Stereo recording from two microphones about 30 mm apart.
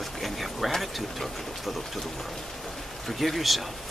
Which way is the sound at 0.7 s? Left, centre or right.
Centre.